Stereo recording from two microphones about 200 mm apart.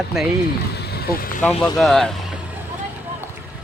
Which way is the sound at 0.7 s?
50° left (ahead or behind).